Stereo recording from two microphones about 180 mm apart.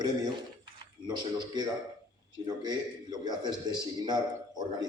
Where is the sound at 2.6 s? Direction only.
25° right (ahead or behind).